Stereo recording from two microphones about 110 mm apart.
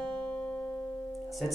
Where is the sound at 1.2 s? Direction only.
Centre (ahead or behind).